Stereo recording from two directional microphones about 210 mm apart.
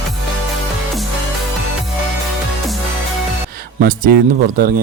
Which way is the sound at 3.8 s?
50° right (ahead or behind).